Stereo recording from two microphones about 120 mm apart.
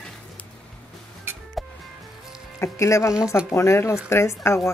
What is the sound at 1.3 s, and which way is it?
Music, 20° right (ahead or behind).